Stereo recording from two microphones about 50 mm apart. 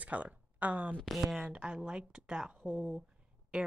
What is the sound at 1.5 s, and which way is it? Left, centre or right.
Speech, right.